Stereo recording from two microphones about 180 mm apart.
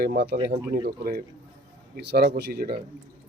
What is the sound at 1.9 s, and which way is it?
Speech, 60° right (ahead or behind).